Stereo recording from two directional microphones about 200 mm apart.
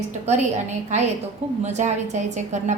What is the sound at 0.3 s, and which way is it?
A woman's voice, 35° right (ahead or behind).